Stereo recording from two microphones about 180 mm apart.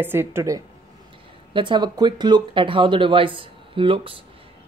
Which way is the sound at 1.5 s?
25° right (ahead or behind).